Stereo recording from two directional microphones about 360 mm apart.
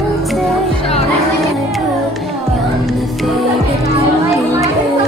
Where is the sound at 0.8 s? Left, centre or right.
Centre.